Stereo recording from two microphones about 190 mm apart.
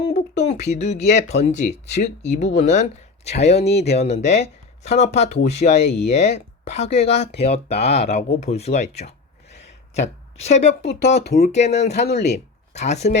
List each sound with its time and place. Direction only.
0.1 s speech: 35° left (ahead or behind)
10.7 s speech: 60° left (ahead or behind)
11.3 s speech: 35° left (ahead or behind)
12.0 s speech: 60° left (ahead or behind)
12.7 s speech: 35° left (ahead or behind)